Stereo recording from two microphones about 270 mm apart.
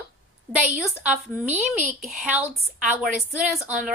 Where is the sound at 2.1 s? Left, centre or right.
Centre.